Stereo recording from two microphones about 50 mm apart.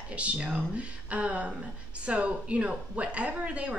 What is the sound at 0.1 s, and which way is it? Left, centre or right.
A woman's voice, right.